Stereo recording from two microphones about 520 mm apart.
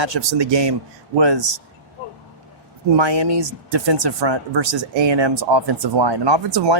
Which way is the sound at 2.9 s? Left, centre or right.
Right.